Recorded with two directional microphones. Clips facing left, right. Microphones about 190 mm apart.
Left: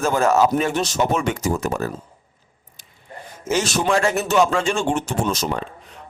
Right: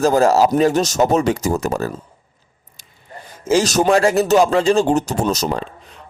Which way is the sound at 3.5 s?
40° right (ahead or behind).